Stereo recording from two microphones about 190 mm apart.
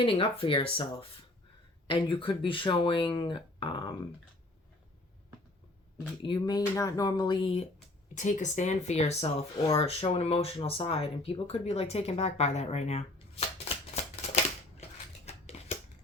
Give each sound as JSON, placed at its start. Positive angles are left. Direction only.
{"t": 0.0, "sound": "speech", "side_deg": 30}
{"t": 1.9, "sound": "speech", "side_deg": 25}
{"t": 6.2, "sound": "speech", "side_deg": 25}
{"t": 8.1, "sound": "speech", "side_deg": 40}
{"t": 15.3, "sound": "scissors", "side_deg": 35}